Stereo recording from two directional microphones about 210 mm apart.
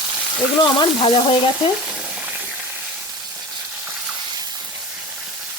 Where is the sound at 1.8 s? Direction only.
5° right (ahead or behind).